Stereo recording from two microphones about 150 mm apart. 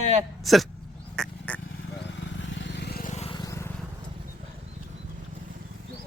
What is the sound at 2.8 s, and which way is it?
Vehicle, 90° left.